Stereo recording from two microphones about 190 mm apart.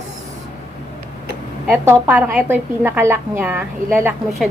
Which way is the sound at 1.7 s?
10° right (ahead or behind).